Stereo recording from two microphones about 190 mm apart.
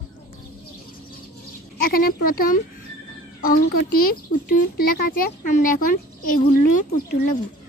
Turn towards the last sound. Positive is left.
turn(degrees=50)  # may be behind; listen again after turning